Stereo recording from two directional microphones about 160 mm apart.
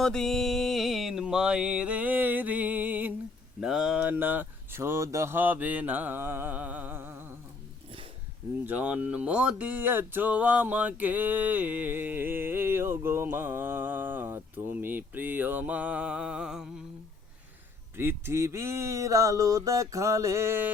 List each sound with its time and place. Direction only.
0.0 s mantra: 5° left (ahead or behind)
3.6 s speech: 5° right (ahead or behind)
8.6 s speech: 10° right (ahead or behind)
17.9 s a sound: 15° right (ahead or behind)